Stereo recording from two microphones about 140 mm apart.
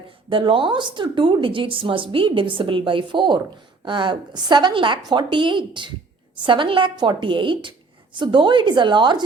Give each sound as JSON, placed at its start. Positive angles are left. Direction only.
{"t": 0.3, "sound": "a woman's voice", "side_deg": -35}